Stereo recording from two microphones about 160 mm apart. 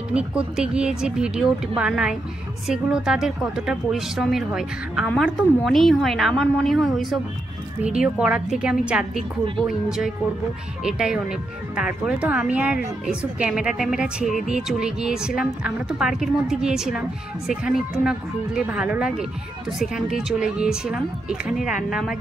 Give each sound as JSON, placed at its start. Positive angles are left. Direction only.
{"t": 0.1, "sound": "a woman's voice", "side_deg": -5}